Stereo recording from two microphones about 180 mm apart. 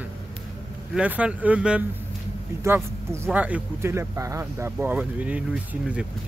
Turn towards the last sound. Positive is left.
turn(degrees=-5)  # may be behind; listen again after turning